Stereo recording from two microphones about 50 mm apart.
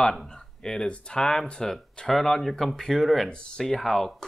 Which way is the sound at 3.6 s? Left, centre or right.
Centre.